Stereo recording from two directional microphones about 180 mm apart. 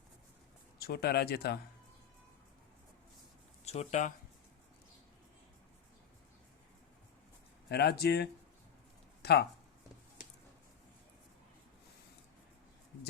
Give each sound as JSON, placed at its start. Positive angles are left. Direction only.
{"t": 0.8, "sound": "speech", "side_deg": 60}
{"t": 3.7, "sound": "speech", "side_deg": 40}
{"t": 7.7, "sound": "speech", "side_deg": 65}